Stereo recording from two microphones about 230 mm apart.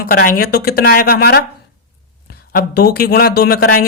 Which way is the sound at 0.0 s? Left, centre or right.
Left.